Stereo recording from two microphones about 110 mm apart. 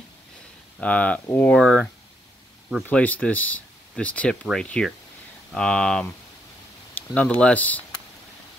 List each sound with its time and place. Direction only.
0.7 s speech: 10° left (ahead or behind)
1.5 s speech: 5° left (ahead or behind)